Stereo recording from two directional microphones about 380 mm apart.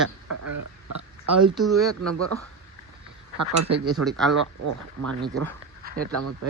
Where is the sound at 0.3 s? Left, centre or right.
Right.